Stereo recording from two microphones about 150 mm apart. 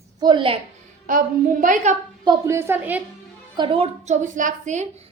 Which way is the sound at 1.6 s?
55° right (ahead or behind).